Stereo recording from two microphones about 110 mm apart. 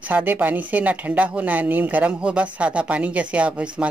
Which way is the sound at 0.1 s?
15° right (ahead or behind).